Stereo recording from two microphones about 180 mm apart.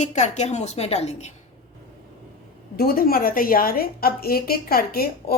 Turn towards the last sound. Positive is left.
turn(degrees=55)  # may be behind; listen again after turning